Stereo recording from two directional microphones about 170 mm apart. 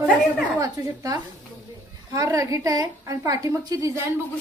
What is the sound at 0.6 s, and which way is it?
A woman's voice, 20° right (ahead or behind).